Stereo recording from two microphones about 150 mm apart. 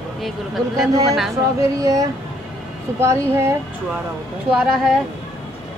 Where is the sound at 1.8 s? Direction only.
20° right (ahead or behind).